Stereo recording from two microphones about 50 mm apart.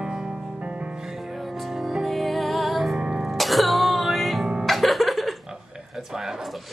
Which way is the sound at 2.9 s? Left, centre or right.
Right.